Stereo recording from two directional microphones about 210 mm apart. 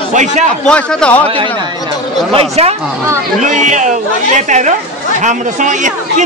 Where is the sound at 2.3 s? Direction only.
30° right (ahead or behind).